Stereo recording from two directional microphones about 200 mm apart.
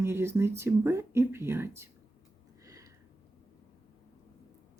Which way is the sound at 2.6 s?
15° right (ahead or behind).